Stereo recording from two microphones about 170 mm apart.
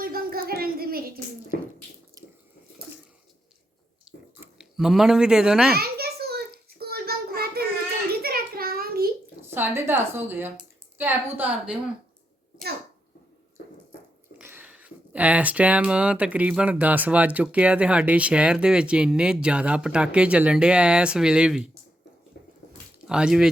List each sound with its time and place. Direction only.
0.0 s a sound: 60° right (ahead or behind)
2.2 s drip: 20° right (ahead or behind)
4.4 s speech: 5° right (ahead or behind)
5.7 s child singing: 65° right (ahead or behind)
8.2 s a sound: 60° right (ahead or behind)
9.4 s speech: 15° right (ahead or behind)
14.3 s speech: 10° right (ahead or behind)
23.0 s speech: 5° right (ahead or behind)